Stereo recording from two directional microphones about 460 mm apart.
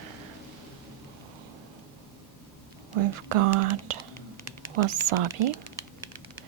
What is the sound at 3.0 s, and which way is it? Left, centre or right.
Whispering, right.